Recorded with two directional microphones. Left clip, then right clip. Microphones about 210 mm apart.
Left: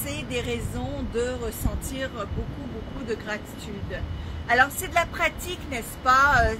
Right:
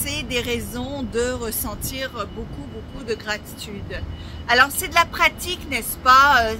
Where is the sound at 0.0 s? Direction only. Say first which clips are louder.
Right 5 dB; 25° right (ahead or behind).